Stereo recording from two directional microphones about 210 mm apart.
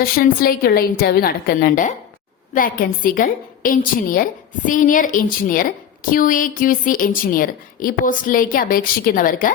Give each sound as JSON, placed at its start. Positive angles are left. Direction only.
{"t": 0.0, "sound": "a woman's voice", "side_deg": 45}